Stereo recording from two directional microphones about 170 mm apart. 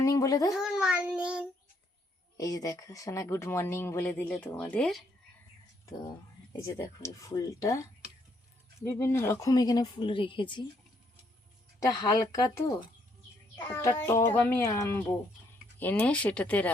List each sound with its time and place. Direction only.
0.0 s a sound: 20° left (ahead or behind)
0.6 s child singing: 5° right (ahead or behind)
2.4 s speech: 20° left (ahead or behind); by 5.0 s 5° left (ahead or behind)
6.6 s speech: 15° left (ahead or behind)
8.8 s speech: 15° left (ahead or behind)
12.1 s speech: 25° left (ahead or behind)
13.7 s speech: 15° left (ahead or behind)